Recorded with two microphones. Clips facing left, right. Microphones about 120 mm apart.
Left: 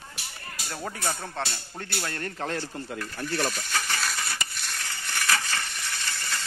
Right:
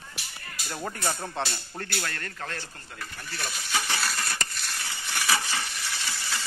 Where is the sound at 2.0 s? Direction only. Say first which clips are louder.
Left 4 dB; 20° left (ahead or behind).